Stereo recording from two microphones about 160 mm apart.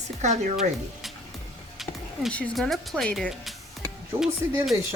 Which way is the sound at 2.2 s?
5° left (ahead or behind).